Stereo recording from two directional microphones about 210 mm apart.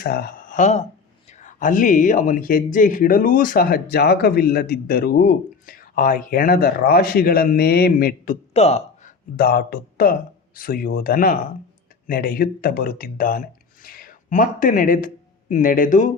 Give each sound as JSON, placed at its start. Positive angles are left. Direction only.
{"t": 0.0, "sound": "speech", "side_deg": 45}
{"t": 9.3, "sound": "speech", "side_deg": 45}